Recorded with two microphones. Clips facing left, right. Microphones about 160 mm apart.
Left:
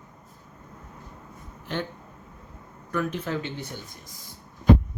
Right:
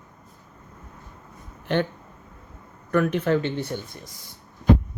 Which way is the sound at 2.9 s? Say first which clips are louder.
Right 7 dB; 60° right (ahead or behind).